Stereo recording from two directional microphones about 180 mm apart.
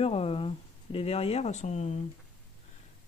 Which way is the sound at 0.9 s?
35° left (ahead or behind).